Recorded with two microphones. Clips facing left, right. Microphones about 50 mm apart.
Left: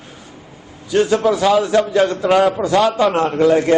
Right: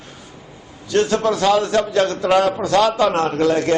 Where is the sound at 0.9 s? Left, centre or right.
Centre.